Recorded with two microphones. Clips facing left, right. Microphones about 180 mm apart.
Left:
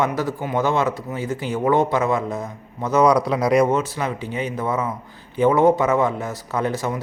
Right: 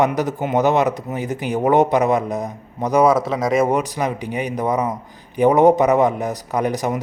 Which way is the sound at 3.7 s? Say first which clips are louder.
Right 2 dB; 15° right (ahead or behind).